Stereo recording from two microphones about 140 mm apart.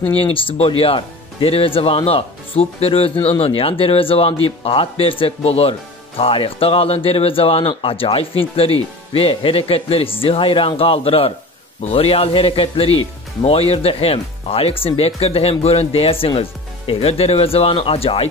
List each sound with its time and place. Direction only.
0.1 s speech: 40° left (ahead or behind)